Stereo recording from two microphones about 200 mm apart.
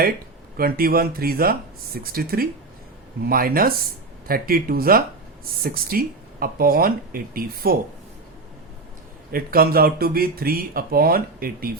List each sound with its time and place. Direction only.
0.5 s speech: 50° right (ahead or behind)
9.3 s speech: 50° right (ahead or behind)